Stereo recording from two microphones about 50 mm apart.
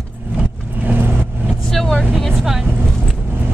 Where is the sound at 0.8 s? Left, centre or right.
Right.